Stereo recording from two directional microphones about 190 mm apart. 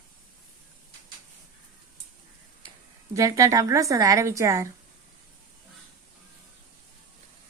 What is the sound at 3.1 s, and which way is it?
A woman's voice, 15° right (ahead or behind).